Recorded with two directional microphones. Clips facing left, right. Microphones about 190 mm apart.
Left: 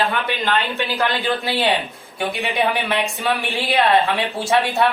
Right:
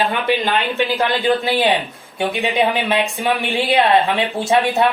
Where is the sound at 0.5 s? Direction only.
15° right (ahead or behind).